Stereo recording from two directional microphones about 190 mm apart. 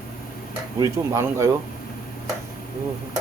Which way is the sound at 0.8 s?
15° right (ahead or behind).